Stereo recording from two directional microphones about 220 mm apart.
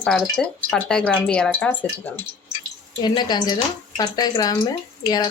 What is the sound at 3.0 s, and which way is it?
Speech, 20° left (ahead or behind).